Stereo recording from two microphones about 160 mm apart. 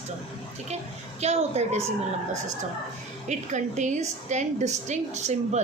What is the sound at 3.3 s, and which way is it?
A woman's voice, 50° right (ahead or behind).